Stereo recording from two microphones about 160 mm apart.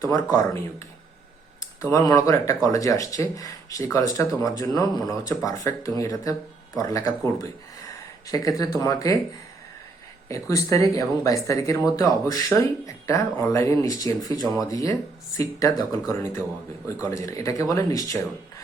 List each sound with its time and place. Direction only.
0.0 s speech: 20° left (ahead or behind)
10.2 s speech: 20° left (ahead or behind)